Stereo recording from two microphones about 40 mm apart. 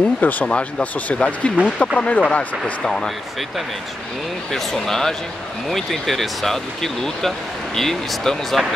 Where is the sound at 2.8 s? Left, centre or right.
Centre.